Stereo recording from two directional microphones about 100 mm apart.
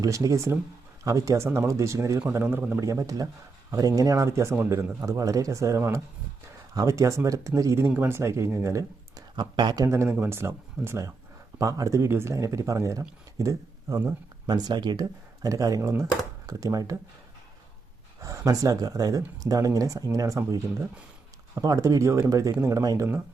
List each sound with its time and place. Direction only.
0.0 s speech: 35° right (ahead or behind)
2.4 s speech: 20° right (ahead or behind)
2.8 s speech: 35° right (ahead or behind)
9.3 s speech: 50° right (ahead or behind); by 14.0 s 35° right (ahead or behind)
14.4 s speech: 45° right (ahead or behind)
15.4 s speech: 35° right (ahead or behind)
18.2 s speech: 35° right (ahead or behind)
21.5 s speech: 35° right (ahead or behind)